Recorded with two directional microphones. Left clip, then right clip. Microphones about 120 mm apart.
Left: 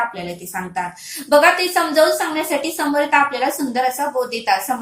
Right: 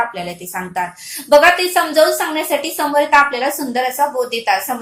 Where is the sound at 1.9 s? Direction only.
25° right (ahead or behind).